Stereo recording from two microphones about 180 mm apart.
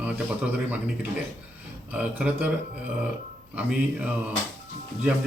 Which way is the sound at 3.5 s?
5° right (ahead or behind).